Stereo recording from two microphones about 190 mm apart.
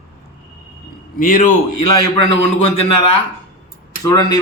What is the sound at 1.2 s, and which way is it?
Speech, 45° left (ahead or behind).